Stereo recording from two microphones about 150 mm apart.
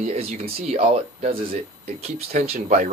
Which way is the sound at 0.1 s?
45° right (ahead or behind).